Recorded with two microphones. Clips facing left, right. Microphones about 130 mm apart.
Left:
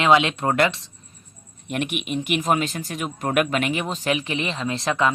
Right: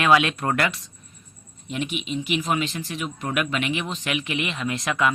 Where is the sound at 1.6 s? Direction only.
60° left (ahead or behind).